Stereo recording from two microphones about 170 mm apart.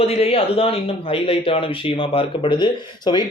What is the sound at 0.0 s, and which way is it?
A man's voice, 35° left (ahead or behind).